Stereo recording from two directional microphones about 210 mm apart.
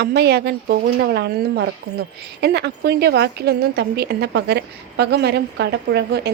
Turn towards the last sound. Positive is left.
turn(degrees=-50)  # may be behind; listen again after turning